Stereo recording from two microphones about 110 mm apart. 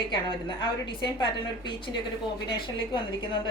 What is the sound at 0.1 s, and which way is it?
A woman's voice, 45° left (ahead or behind).